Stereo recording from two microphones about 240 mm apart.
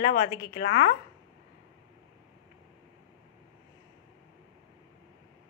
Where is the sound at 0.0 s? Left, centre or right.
Left.